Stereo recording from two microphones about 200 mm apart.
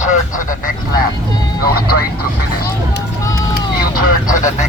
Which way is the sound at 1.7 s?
50° left (ahead or behind).